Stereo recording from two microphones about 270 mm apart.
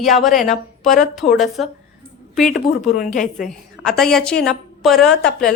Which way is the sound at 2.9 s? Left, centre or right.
Left.